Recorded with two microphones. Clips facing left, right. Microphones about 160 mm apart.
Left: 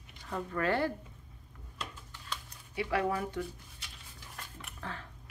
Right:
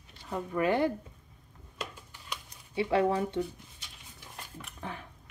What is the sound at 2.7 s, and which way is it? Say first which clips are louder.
Speech: right 5 dB; 25° right (ahead or behind).